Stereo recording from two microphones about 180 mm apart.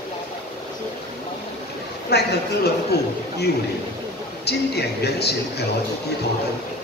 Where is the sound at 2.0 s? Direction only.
65° left (ahead or behind).